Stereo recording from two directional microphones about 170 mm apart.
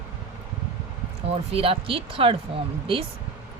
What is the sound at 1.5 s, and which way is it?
Speech, 35° right (ahead or behind).